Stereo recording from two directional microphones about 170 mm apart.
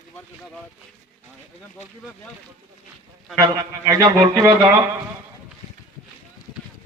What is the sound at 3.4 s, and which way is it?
A man's voice, 20° right (ahead or behind).